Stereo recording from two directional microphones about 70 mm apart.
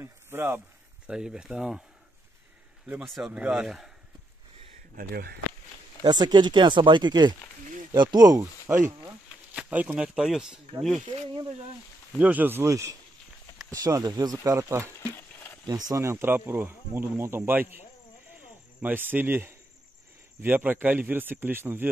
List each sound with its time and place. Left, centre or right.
0.0 s speech: right
1.0 s speech: centre
3.0 s speech: centre
3.3 s speech: centre
3.6 s speech: centre
6.0 s speech: right
8.6 s speech: right
9.5 s speech: right
12.2 s speech: right
12.6 s speech: right
14.4 s speech: right
15.0 s a sound: left
15.6 s speech: right
16.0 s speech: right